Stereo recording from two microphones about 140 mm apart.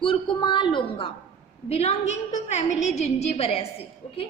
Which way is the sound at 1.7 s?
50° left (ahead or behind).